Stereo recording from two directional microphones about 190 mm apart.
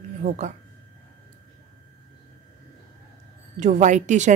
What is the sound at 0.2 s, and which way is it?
Speech, 35° right (ahead or behind).